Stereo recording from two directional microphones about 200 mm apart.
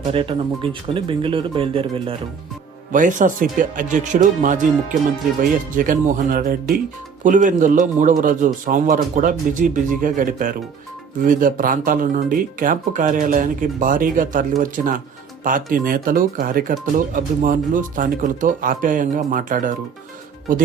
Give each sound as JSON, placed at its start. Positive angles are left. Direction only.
{"t": 0.0, "sound": "speech", "side_deg": -25}
{"t": 2.9, "sound": "speech", "side_deg": -40}